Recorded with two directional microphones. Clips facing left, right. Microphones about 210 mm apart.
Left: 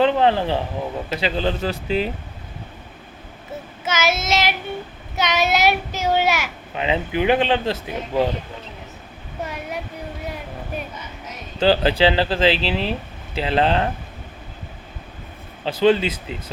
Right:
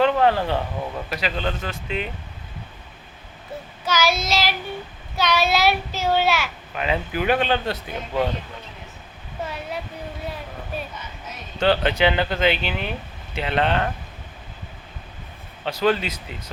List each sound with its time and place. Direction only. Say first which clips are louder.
0.0 s a child's voice: left 1 dB; 30° left (ahead or behind)
3.8 s a child's voice: even; 20° left (ahead or behind)
11.6 s speech: left 3 dB; 30° left (ahead or behind)
15.8 s a child's voice: left 5 dB; 25° left (ahead or behind)